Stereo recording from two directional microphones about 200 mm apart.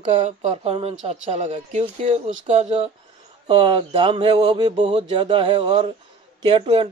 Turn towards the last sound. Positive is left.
turn(degrees=-25)  # may be behind; listen again after turning